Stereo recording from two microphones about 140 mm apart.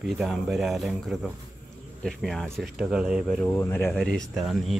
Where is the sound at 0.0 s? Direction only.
Centre (ahead or behind).